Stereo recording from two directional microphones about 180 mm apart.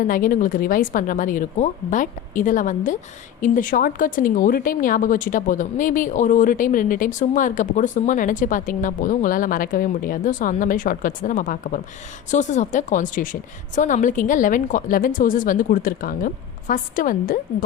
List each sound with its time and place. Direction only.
0.0 s speech: 50° left (ahead or behind)